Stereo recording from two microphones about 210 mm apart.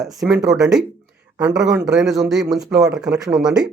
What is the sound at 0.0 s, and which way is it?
Speech, centre (ahead or behind).